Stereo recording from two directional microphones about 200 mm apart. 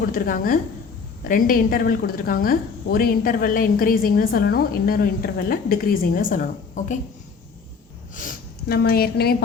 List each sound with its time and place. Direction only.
0.1 s a woman's voice: 45° left (ahead or behind)
8.1 s a woman's voice: 40° left (ahead or behind)